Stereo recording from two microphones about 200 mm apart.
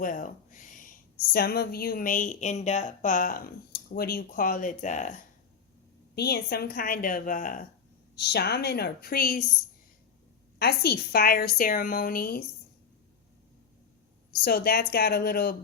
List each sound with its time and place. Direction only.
0.0 s a woman's voice: 40° left (ahead or behind)
6.1 s a woman's voice: 50° left (ahead or behind)
8.1 s a woman's voice: 55° left (ahead or behind)
10.6 s a woman's voice: 50° left (ahead or behind)
14.4 s a woman's voice: 50° left (ahead or behind)